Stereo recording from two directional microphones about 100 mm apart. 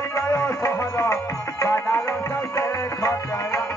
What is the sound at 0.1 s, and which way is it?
Music, 30° left (ahead or behind).